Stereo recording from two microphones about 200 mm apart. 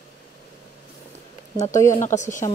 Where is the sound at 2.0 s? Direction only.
40° left (ahead or behind).